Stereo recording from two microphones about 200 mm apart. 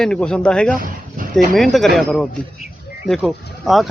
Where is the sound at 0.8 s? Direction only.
45° right (ahead or behind).